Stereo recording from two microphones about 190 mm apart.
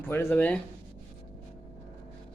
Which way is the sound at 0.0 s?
10° left (ahead or behind).